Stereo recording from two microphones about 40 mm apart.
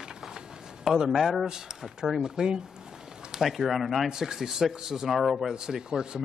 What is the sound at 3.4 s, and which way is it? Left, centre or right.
Speech, centre.